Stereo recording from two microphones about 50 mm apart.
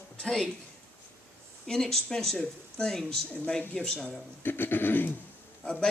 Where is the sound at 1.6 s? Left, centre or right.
Centre.